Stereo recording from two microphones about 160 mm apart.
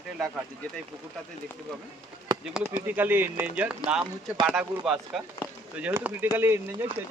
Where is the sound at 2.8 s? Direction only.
10° right (ahead or behind).